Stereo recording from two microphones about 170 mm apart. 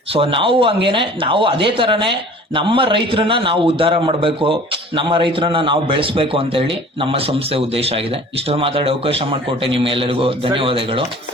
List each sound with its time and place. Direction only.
0.1 s a man's voice: 30° right (ahead or behind)